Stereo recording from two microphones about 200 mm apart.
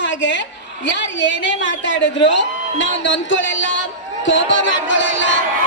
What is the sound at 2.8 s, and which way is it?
Speech, 65° left (ahead or behind).